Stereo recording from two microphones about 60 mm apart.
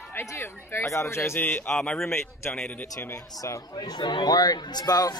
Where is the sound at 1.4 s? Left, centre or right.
Left.